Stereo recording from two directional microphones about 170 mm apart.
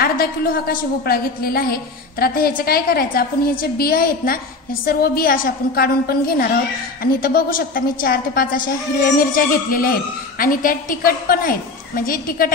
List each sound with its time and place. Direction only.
0.0 s a woman's voice: 60° left (ahead or behind)